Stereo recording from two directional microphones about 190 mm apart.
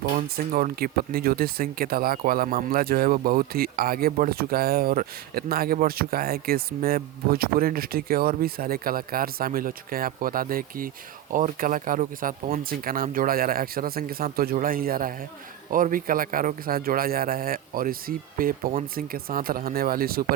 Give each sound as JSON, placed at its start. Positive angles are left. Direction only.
{"t": 0.2, "sound": "speech", "side_deg": -50}